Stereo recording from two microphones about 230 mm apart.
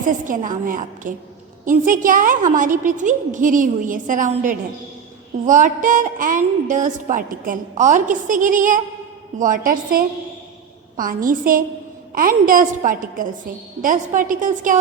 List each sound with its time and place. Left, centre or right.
0.0 s a woman's voice: right